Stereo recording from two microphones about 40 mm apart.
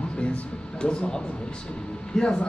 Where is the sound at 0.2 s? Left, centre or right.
Left.